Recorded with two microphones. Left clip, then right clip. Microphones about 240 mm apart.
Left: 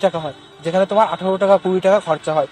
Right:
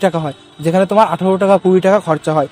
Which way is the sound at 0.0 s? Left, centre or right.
Right.